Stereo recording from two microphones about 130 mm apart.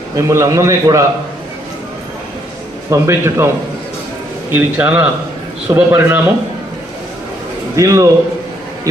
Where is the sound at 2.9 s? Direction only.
20° right (ahead or behind).